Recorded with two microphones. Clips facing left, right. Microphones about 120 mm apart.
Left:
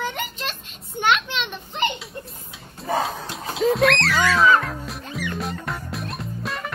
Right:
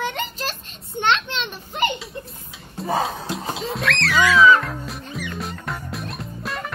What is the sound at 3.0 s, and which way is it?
Speech, centre (ahead or behind).